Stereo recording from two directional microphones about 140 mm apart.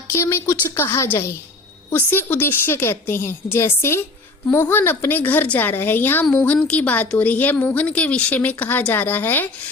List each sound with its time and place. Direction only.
0.1 s a woman's voice: 15° left (ahead or behind)